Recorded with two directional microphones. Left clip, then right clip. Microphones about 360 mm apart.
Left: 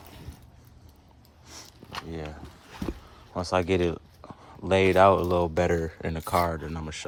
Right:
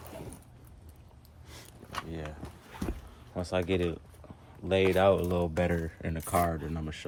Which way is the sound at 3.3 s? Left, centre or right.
Centre.